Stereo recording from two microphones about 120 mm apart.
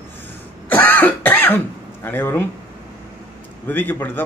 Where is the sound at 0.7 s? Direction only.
15° left (ahead or behind).